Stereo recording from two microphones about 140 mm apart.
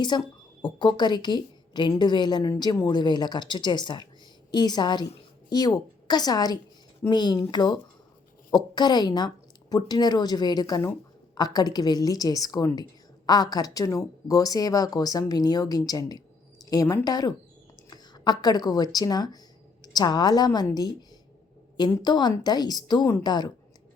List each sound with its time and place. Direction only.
0.1 s a woman's voice: 30° left (ahead or behind)
21.8 s speech: 30° left (ahead or behind)